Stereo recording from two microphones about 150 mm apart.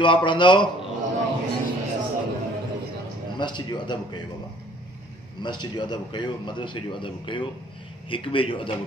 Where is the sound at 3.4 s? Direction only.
30° left (ahead or behind).